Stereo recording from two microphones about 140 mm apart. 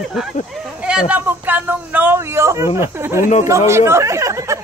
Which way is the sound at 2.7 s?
15° right (ahead or behind).